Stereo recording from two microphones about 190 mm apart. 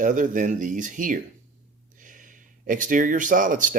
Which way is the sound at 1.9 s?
45° right (ahead or behind).